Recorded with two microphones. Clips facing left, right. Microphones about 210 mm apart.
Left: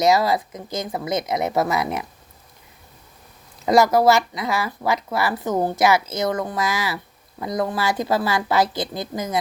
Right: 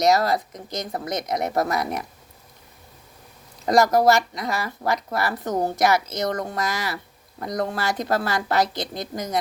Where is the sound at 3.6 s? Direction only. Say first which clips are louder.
Left 2 dB; 5° left (ahead or behind).